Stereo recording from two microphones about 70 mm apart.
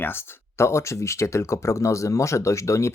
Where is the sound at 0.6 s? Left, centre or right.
Left.